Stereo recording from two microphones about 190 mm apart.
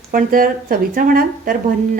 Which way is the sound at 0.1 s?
45° right (ahead or behind).